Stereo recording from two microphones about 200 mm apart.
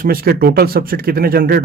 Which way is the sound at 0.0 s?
45° right (ahead or behind).